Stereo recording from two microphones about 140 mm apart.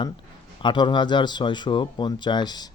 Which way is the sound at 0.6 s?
35° left (ahead or behind).